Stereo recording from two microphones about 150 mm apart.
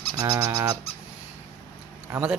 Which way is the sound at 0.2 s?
25° right (ahead or behind).